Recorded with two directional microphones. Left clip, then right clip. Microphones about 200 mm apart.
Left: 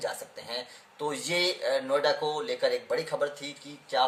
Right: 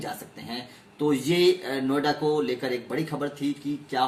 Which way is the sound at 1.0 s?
10° left (ahead or behind).